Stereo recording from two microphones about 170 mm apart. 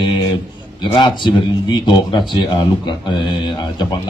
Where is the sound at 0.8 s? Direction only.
25° left (ahead or behind).